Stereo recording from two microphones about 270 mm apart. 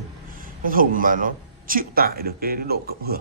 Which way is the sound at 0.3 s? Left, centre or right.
Right.